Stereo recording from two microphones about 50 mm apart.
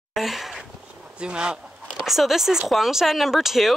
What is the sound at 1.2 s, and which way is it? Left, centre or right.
Speech, centre.